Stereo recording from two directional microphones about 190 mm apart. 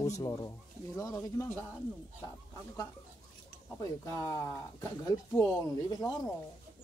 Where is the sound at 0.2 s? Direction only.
20° left (ahead or behind).